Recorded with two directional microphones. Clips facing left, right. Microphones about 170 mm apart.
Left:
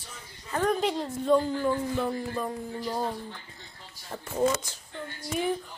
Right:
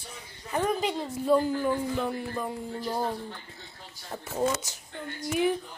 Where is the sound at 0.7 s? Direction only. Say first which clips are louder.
Left 4 dB; centre (ahead or behind).